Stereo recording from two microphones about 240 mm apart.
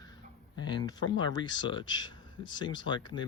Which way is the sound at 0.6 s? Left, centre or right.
Centre.